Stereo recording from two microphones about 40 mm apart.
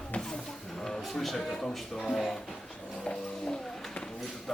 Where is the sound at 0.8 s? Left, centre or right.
Centre.